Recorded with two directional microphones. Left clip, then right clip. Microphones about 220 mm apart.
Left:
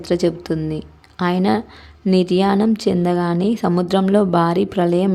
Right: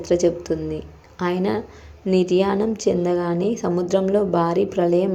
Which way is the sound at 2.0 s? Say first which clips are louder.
Left 2 dB; 45° left (ahead or behind).